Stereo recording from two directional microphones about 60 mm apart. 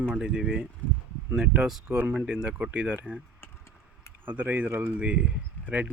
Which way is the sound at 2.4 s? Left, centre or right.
Right.